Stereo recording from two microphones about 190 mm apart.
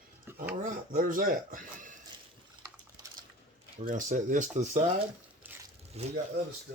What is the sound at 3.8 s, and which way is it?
Speech, 40° right (ahead or behind).